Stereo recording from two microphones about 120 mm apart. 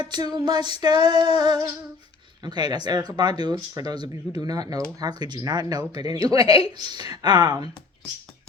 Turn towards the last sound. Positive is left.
turn(degrees=-35)  # may be behind; listen again after turning